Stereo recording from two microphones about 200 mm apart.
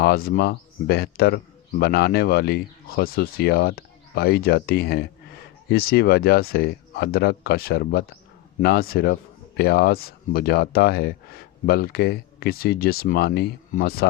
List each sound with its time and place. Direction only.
0.0 s speech: 50° left (ahead or behind)